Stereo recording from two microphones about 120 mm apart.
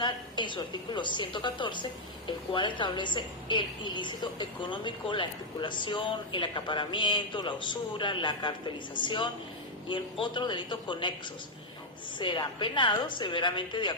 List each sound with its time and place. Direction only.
0.0 s a woman's voice: 40° left (ahead or behind)
12.2 s a woman's voice: 45° left (ahead or behind)